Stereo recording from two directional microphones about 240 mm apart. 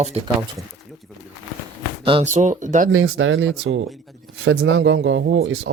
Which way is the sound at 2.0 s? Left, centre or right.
Right.